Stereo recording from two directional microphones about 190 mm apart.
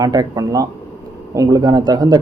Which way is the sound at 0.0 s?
20° right (ahead or behind).